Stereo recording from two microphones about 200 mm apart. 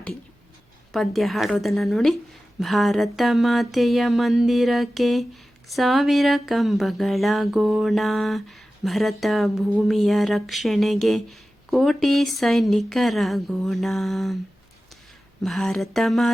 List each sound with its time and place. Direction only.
0.9 s speech: centre (ahead or behind)
15.4 s speech: centre (ahead or behind)